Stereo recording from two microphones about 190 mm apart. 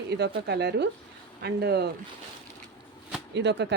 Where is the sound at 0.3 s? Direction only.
60° right (ahead or behind).